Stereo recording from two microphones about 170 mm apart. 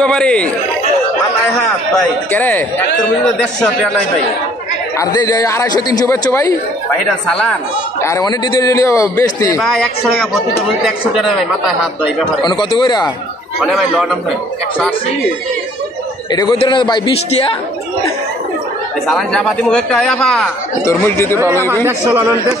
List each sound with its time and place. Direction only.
0.0 s speech: 5° left (ahead or behind)
2.3 s speech: 10° left (ahead or behind)
4.9 s a man's voice: 20° left (ahead or behind)
7.2 s speech: 5° left (ahead or behind)
8.0 s a man's voice: 20° left (ahead or behind)
10.8 s speech: centre (ahead or behind)
12.4 s a man's voice: 25° left (ahead or behind)
13.6 s speech: 5° right (ahead or behind)
16.3 s a man's voice: 25° left (ahead or behind)
19.0 s speech: centre (ahead or behind)
20.8 s speech: 15° left (ahead or behind)
21.8 s a man's voice: 15° right (ahead or behind)